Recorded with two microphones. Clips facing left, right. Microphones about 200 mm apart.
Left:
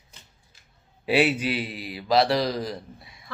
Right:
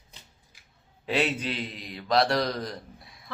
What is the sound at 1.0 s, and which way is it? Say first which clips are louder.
Speech: left 5 dB; 10° left (ahead or behind).